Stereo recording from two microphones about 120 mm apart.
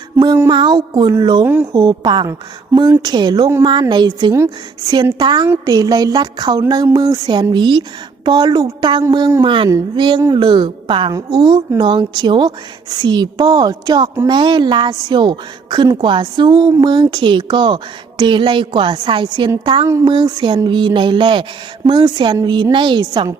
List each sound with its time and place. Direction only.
0.5 s a woman's voice: 40° right (ahead or behind)
9.6 s a woman's voice: 25° right (ahead or behind)
10.3 s a woman's voice: 40° right (ahead or behind)